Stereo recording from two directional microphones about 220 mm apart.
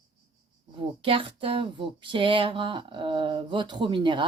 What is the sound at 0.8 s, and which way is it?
Speech, 25° right (ahead or behind).